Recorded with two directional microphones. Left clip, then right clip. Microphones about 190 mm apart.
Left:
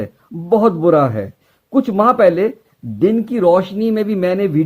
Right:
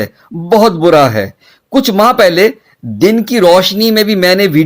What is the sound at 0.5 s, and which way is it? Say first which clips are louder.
Speech: right 5 dB; 35° right (ahead or behind).